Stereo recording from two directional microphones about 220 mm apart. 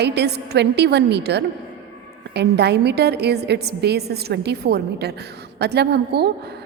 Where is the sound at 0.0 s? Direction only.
50° right (ahead or behind).